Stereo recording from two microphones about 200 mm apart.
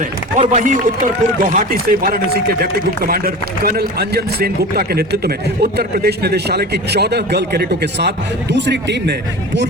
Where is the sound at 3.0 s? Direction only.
50° right (ahead or behind).